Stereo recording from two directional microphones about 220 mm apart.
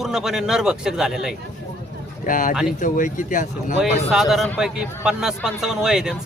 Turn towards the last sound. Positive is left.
turn(degrees=0)  # may be behind; listen again after turning